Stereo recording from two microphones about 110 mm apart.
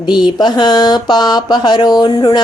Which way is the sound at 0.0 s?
40° left (ahead or behind).